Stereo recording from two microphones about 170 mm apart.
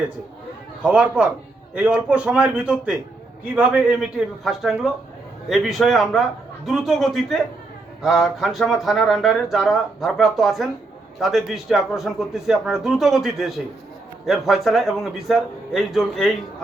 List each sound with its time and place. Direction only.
0.8 s a man's voice: 10° right (ahead or behind)